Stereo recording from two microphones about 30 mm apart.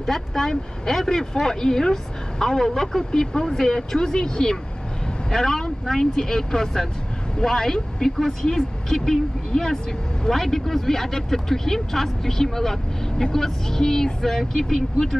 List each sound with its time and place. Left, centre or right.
0.0 s speech: centre